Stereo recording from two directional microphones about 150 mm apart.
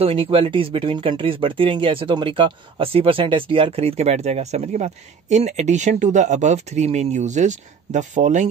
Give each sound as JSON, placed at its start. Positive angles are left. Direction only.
{"t": 0.0, "sound": "speech", "side_deg": -40}